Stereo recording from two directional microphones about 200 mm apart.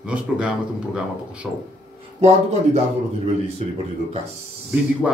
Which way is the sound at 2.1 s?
30° right (ahead or behind).